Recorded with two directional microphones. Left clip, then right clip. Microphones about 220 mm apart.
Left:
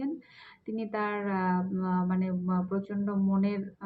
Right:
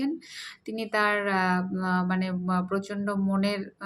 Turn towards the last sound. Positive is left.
turn(degrees=-20)  # may be behind; listen again after turning